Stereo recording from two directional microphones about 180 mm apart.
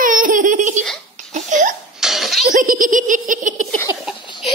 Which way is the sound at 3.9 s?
15° right (ahead or behind).